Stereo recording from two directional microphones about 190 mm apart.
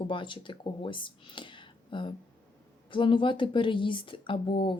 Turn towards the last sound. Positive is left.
turn(degrees=25)  # may be behind; listen again after turning